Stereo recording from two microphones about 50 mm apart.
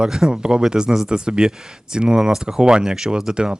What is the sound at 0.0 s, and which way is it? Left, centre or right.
Speech, centre.